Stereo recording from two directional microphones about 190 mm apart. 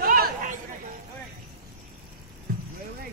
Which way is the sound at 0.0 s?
50° right (ahead or behind).